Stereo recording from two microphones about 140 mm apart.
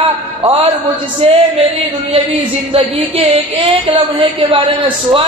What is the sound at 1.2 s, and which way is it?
Speech, 45° right (ahead or behind).